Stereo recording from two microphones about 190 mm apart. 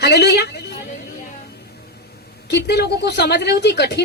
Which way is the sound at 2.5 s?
60° left (ahead or behind).